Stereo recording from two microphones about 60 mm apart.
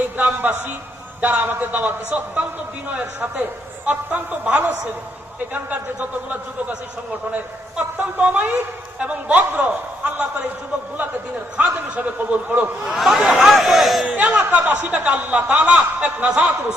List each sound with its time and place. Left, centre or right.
0.2 s a man's voice: right
2.0 s speech: right
11.5 s speech: right
12.9 s speech: centre
14.1 s speech: right